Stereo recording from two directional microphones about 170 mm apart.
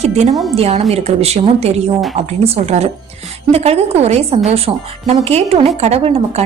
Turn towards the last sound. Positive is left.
turn(degrees=-35)  # may be behind; listen again after turning